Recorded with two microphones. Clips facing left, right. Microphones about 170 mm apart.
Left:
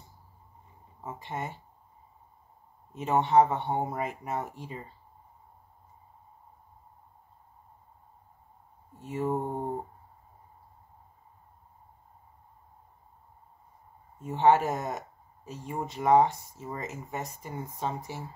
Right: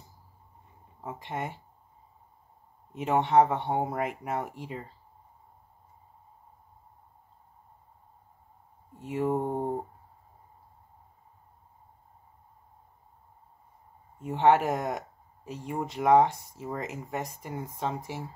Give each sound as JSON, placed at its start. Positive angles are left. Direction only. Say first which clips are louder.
{"t": 1.0, "sound": "speech", "louder": "right 1 dB", "side_deg": -60}
{"t": 2.9, "sound": "speech", "louder": "even", "side_deg": -70}
{"t": 9.0, "sound": "speech", "louder": "right 2 dB", "side_deg": -65}
{"t": 14.2, "sound": "speech", "louder": "even", "side_deg": -65}